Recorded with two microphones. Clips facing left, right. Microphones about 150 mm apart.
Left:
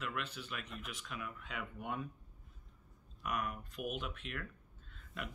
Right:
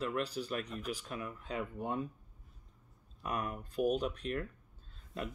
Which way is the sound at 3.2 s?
30° right (ahead or behind).